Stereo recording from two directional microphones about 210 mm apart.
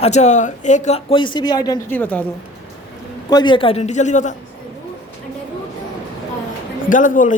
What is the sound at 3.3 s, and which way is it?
A man's voice, 20° left (ahead or behind).